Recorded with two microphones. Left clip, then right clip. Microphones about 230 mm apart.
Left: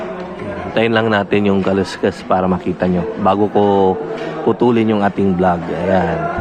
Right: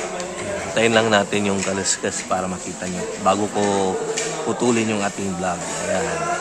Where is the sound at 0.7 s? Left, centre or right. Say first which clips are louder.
Left 2 dB; centre.